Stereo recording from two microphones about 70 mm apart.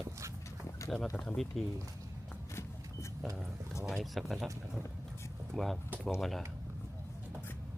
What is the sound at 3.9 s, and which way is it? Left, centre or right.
Speech, centre.